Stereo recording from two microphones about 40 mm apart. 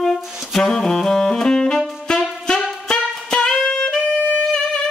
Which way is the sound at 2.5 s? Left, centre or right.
Centre.